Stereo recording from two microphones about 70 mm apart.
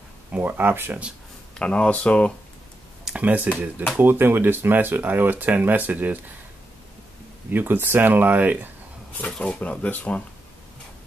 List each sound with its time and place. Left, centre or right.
0.3 s speech: right
1.5 s speech: centre
3.2 s speech: right
7.4 s speech: right
9.4 s speech: centre